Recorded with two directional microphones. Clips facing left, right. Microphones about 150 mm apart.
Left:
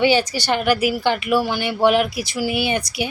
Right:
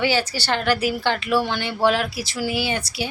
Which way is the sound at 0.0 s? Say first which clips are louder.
Left 5 dB; 20° left (ahead or behind).